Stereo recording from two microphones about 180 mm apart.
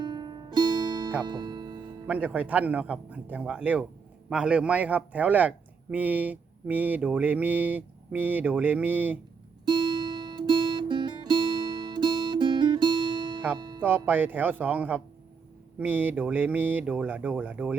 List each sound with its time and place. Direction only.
0.0 s music: 25° right (ahead or behind)
2.0 s a man's voice: 10° right (ahead or behind)
9.6 s guitar: 25° right (ahead or behind)
13.6 s music: 25° right (ahead or behind)
13.8 s a man's voice: 10° right (ahead or behind)